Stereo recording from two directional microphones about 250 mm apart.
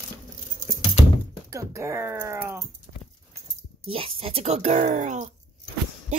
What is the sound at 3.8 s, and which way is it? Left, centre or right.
Speech, right.